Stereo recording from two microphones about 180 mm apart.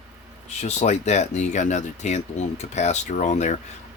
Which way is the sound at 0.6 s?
40° left (ahead or behind).